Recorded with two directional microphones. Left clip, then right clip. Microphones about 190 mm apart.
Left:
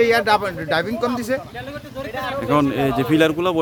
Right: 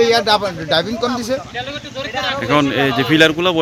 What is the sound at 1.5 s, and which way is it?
Speech, 60° left (ahead or behind).